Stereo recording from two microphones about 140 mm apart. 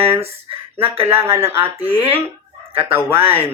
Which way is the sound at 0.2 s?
45° right (ahead or behind).